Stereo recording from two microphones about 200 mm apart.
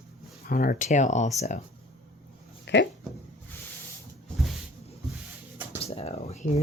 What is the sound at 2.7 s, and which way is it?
Speech, 60° left (ahead or behind).